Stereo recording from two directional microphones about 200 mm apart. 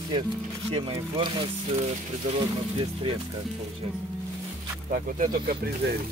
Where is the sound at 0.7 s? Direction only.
30° right (ahead or behind).